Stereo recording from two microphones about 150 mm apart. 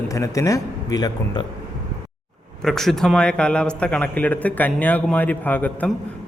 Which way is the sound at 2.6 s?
5° left (ahead or behind).